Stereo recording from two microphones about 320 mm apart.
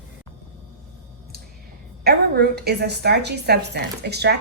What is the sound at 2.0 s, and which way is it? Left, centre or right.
A woman's voice, right.